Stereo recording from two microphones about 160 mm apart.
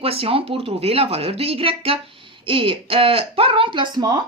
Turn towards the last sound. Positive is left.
turn(degrees=-25)  # may be behind; listen again after turning